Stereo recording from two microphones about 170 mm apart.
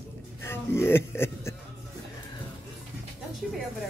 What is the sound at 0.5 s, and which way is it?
A man's voice, 15° left (ahead or behind).